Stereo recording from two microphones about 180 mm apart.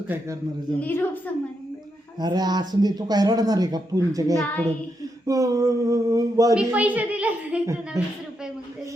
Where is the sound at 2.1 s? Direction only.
20° right (ahead or behind).